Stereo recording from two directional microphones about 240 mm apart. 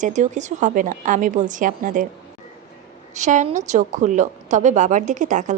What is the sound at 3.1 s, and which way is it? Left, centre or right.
A woman's voice, right.